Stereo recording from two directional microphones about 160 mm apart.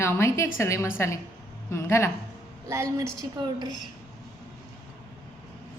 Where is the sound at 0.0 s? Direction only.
15° left (ahead or behind).